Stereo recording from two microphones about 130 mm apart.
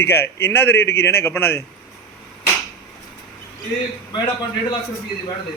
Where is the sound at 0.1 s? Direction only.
15° left (ahead or behind).